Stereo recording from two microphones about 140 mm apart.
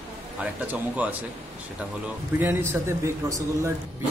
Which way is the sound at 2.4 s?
20° right (ahead or behind).